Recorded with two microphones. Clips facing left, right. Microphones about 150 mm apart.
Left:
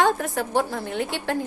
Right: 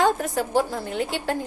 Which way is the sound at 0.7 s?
35° right (ahead or behind).